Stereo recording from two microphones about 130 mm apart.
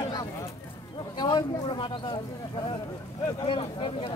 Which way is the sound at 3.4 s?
45° left (ahead or behind).